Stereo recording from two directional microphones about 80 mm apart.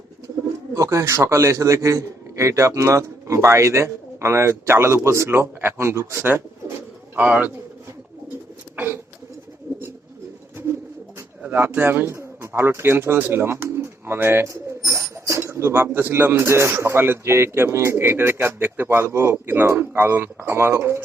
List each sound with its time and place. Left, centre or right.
0.7 s a man's voice: right; by 7.5 s centre
8.7 s a sound: right
9.7 s bird: right
11.4 s speech: right
14.4 s speech: right